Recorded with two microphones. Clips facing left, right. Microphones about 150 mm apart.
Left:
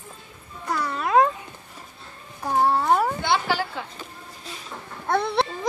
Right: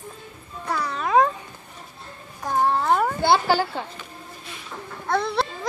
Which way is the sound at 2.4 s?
5° left (ahead or behind).